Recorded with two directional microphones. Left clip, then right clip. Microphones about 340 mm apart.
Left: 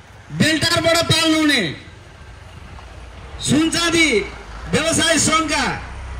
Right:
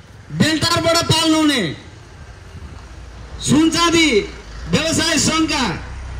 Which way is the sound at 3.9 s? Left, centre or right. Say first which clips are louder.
Right 1 dB; right.